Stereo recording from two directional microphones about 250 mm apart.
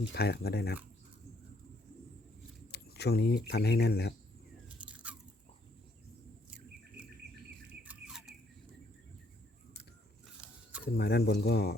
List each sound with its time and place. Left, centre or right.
0.1 s speech: left
2.7 s speech: left
4.8 s biting: centre
7.7 s squawk: centre
10.9 s speech: left